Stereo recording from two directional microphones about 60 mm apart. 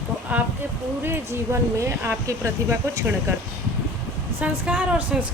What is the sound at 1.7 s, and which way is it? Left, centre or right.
Speech, right.